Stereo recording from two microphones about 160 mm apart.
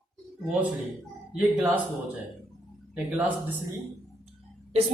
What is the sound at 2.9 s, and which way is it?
Speech, 10° right (ahead or behind).